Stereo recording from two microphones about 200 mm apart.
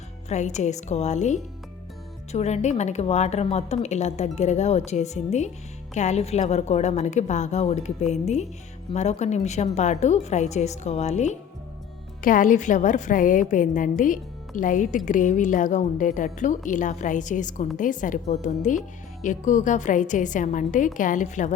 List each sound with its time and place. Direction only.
0.3 s a woman's voice: 35° left (ahead or behind)